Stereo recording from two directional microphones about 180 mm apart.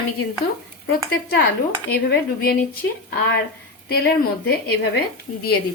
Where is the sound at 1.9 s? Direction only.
60° left (ahead or behind).